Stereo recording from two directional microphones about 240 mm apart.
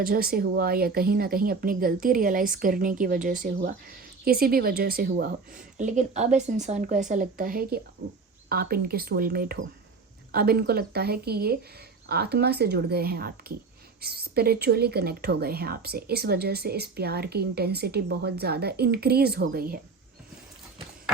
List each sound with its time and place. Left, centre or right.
0.0 s speech: right